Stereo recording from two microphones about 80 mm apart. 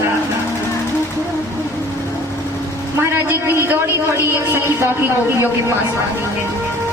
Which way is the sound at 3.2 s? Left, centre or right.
Right.